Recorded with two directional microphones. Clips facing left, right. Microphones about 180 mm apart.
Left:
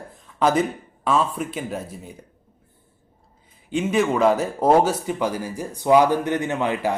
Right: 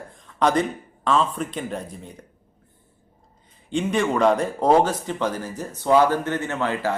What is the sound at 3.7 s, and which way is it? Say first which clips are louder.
Speech: left 1 dB; 5° left (ahead or behind).